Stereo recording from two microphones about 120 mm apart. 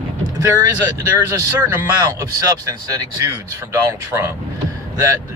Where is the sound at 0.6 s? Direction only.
25° right (ahead or behind).